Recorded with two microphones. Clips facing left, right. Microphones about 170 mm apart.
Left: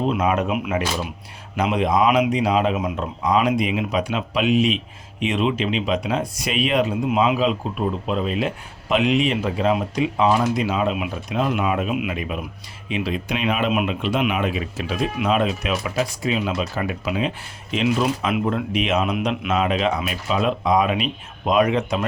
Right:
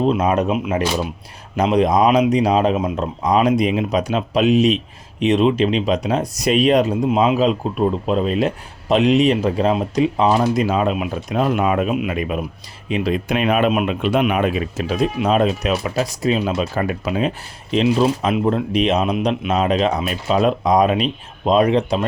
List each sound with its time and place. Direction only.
0.1 s speech: 35° right (ahead or behind)
10.7 s speech: 45° right (ahead or behind)
16.7 s speech: 45° right (ahead or behind)